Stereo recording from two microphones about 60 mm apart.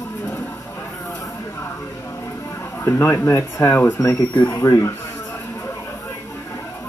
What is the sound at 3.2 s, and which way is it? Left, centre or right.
Speech, left.